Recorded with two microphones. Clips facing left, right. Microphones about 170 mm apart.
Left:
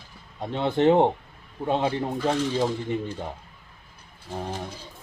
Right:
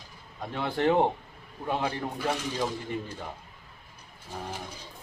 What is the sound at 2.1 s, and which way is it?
Speech, 10° right (ahead or behind).